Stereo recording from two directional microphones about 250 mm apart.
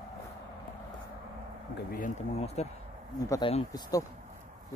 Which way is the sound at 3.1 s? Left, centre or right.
Centre.